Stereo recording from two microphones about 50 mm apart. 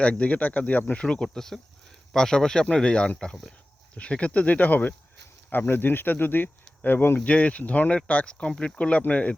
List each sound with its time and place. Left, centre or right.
0.0 s speech: left
1.0 s speech: centre; by 4.9 s left
5.5 s speech: left
7.3 s speech: left